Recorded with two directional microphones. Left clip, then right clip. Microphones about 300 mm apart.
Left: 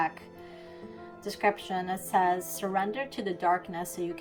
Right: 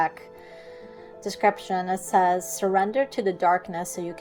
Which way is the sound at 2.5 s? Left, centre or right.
Centre.